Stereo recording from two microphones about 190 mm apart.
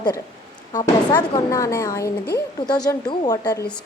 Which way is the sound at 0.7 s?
20° left (ahead or behind).